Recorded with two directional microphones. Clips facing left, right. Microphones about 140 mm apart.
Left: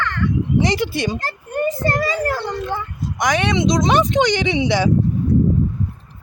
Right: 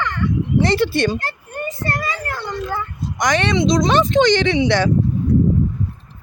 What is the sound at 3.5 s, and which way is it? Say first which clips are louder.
Speech: right 1 dB; 20° left (ahead or behind).